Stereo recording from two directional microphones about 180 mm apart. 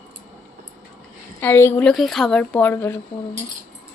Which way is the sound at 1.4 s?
15° left (ahead or behind).